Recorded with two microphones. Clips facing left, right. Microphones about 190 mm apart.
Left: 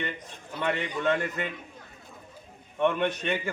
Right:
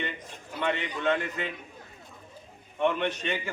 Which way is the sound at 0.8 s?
45° left (ahead or behind).